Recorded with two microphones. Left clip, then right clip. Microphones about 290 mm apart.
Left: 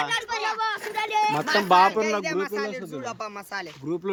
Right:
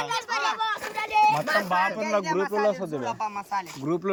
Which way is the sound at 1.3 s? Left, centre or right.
Centre.